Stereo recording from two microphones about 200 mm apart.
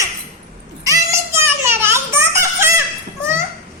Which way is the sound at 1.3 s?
10° right (ahead or behind).